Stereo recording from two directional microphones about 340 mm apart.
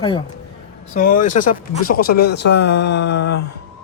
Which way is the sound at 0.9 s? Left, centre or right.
Left.